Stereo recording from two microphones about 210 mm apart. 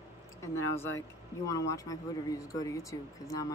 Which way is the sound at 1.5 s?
15° left (ahead or behind).